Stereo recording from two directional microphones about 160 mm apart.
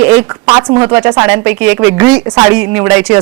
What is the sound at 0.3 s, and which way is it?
Speech, 20° right (ahead or behind).